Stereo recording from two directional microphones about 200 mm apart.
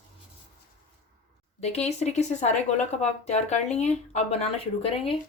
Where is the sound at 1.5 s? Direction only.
30° left (ahead or behind).